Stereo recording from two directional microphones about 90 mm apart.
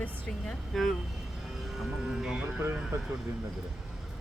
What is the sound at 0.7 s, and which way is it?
Speech, centre (ahead or behind).